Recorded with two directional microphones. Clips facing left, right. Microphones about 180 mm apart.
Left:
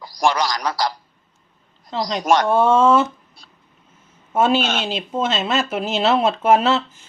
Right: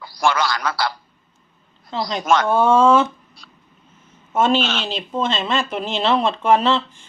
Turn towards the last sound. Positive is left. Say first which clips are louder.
# even
turn(degrees=5)  # may be behind; listen again after turning